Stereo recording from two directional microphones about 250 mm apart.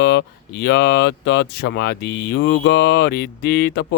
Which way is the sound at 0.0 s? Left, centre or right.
Left.